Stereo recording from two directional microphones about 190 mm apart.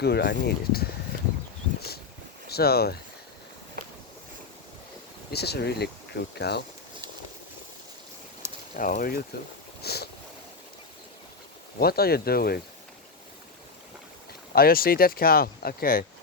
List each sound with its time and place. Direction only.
0.0 s speech: 60° left (ahead or behind)
2.5 s speech: 55° left (ahead or behind)
5.3 s speech: 60° left (ahead or behind)
8.7 s speech: 45° left (ahead or behind)
9.8 s boat: 55° left (ahead or behind)
11.8 s speech: 55° left (ahead or behind)
14.5 s speech: 50° left (ahead or behind)